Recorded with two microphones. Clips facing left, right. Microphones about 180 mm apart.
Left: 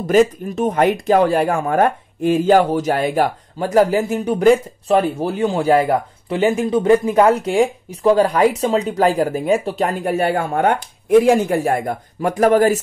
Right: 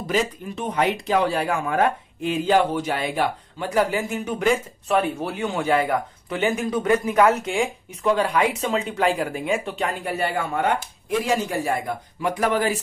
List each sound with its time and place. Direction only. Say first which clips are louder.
0.0 s speech: left 10 dB; 45° left (ahead or behind)